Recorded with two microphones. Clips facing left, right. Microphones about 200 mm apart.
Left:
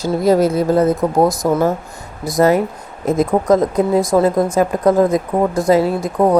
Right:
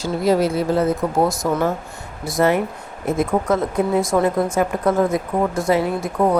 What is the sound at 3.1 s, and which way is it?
Speech, 40° left (ahead or behind).